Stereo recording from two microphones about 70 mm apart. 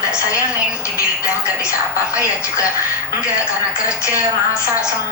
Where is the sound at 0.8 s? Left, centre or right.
Left.